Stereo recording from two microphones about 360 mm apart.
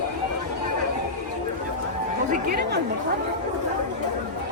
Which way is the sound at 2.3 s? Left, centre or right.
Right.